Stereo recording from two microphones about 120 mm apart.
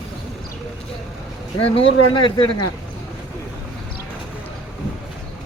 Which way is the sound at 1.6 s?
50° left (ahead or behind).